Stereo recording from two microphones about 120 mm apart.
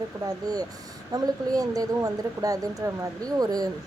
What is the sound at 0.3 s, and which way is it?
Speech, 30° right (ahead or behind).